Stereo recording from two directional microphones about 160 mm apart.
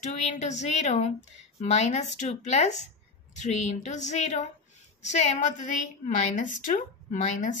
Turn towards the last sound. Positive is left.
turn(degrees=55)  # may be behind; listen again after turning